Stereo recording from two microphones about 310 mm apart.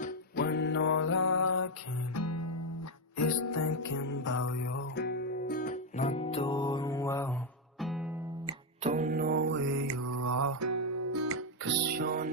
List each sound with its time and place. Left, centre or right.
0.0 s music: left
4.6 s guitar: left; by 8.1 s centre
8.5 s music: right
9.8 s music: right
11.9 s music: right